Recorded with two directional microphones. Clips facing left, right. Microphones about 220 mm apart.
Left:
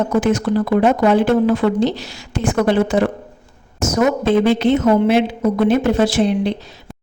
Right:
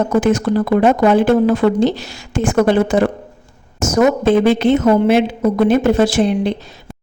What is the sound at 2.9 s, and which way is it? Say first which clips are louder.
Speech: right 2 dB; 50° right (ahead or behind).